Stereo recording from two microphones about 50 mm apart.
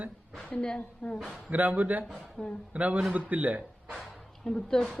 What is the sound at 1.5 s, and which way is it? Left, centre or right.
Speech, right.